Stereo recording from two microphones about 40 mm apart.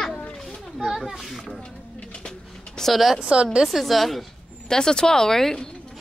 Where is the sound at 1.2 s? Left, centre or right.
Centre.